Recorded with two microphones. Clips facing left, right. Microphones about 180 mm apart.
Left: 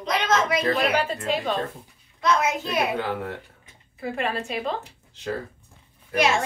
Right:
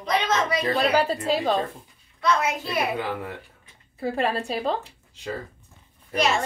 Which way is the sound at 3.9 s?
30° right (ahead or behind).